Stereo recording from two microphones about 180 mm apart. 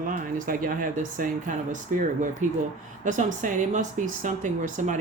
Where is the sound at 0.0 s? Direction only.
50° right (ahead or behind).